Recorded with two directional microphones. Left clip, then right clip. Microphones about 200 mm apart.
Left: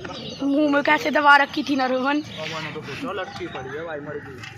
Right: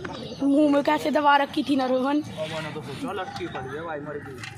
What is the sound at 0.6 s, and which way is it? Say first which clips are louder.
A woman's voice: left 3 dB; 10° right (ahead or behind).